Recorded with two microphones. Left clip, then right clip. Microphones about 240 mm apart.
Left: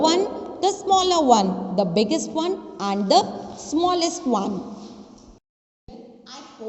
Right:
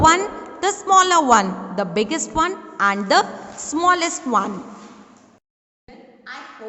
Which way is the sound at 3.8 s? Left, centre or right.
Right.